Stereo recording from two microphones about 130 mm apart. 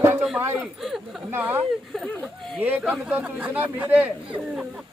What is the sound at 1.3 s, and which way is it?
Speech, 15° right (ahead or behind).